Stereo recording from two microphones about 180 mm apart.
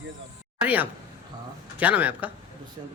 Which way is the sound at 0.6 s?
10° right (ahead or behind).